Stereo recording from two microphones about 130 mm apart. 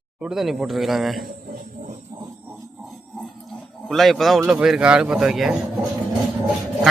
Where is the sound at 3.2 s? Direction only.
Centre (ahead or behind).